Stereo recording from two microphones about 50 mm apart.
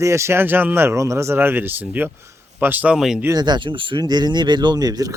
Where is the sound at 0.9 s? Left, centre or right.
Right.